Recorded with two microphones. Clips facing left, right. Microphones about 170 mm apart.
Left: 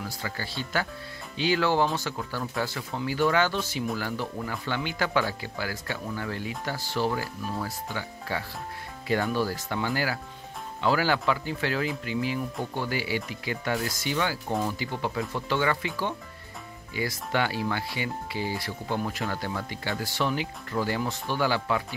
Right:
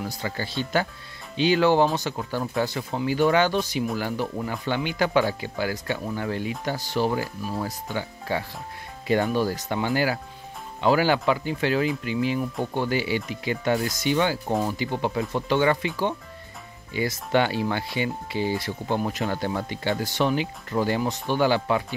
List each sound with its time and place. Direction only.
0.0 s speech: 25° right (ahead or behind)